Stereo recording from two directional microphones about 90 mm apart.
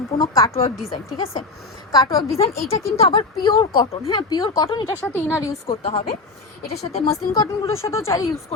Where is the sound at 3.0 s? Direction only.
90° left.